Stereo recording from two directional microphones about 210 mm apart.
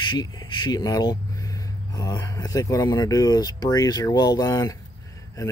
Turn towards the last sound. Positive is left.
turn(degrees=15)  # may be behind; listen again after turning